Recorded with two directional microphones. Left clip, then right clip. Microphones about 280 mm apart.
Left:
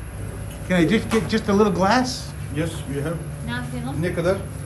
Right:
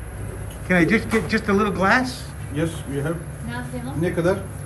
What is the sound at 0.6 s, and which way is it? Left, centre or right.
A woman's voice, centre.